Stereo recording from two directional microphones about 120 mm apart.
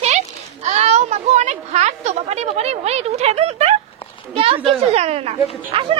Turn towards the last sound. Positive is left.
turn(degrees=-50)  # may be behind; listen again after turning